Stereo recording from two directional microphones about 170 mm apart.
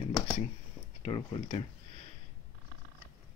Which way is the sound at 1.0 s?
30° left (ahead or behind).